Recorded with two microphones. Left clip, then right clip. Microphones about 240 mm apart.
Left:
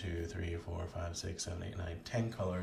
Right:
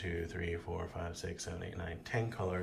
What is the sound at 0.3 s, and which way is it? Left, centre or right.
Speech, centre.